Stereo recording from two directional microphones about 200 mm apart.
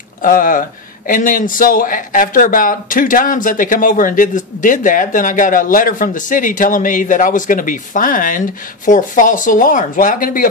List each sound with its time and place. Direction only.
0.2 s a man's voice: 45° left (ahead or behind)